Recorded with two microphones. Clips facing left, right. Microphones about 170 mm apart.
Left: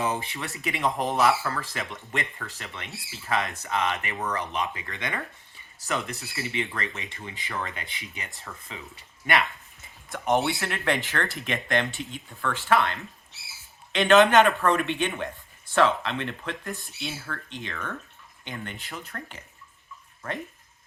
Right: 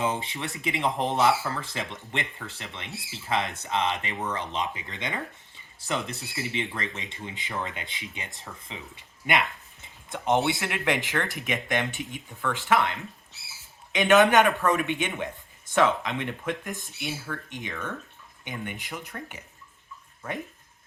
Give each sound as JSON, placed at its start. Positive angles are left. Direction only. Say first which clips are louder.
{"t": 0.0, "sound": "speech", "louder": "even", "side_deg": -20}